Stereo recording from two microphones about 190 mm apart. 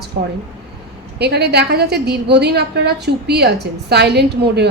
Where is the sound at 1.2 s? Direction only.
60° right (ahead or behind).